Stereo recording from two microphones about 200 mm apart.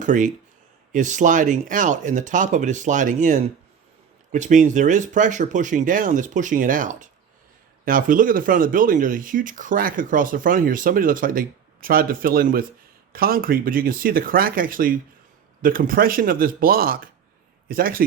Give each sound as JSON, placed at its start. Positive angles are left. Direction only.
{"t": 0.0, "sound": "speech", "side_deg": -40}